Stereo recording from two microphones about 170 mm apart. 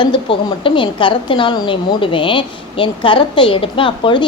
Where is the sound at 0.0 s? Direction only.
30° left (ahead or behind).